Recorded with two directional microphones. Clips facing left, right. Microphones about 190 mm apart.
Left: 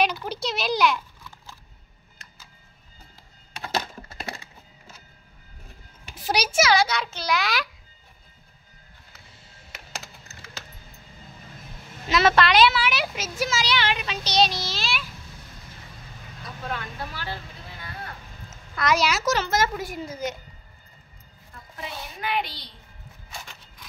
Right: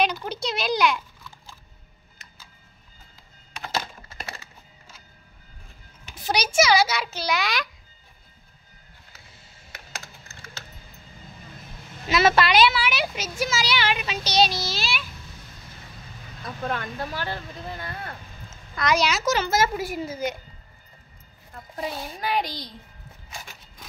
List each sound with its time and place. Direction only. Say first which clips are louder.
0.0 s a child's voice: even; 5° left (ahead or behind)
6.1 s a woman's voice: right 1 dB; 5° left (ahead or behind)
12.1 s a woman's voice: even; 5° right (ahead or behind)
16.4 s speech: right 4 dB; 45° right (ahead or behind)
18.8 s a woman's voice: even; 5° left (ahead or behind)
21.7 s a child's voice: right 5 dB; 40° right (ahead or behind)